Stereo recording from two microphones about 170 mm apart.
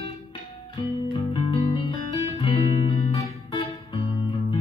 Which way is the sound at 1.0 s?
30° left (ahead or behind).